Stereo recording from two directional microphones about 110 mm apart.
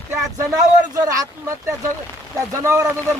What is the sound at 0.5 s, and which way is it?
Speech, 30° right (ahead or behind).